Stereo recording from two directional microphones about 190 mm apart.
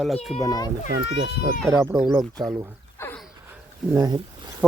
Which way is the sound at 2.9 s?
10° left (ahead or behind).